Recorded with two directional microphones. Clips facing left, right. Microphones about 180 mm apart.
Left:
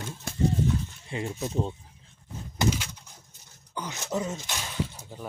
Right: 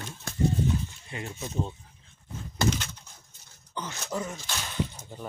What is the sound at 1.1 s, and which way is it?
Speech, 25° left (ahead or behind).